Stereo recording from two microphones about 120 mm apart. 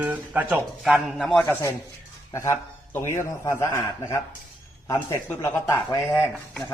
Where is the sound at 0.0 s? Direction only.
15° right (ahead or behind).